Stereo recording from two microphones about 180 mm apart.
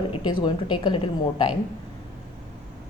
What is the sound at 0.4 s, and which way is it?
A woman's voice, 25° left (ahead or behind).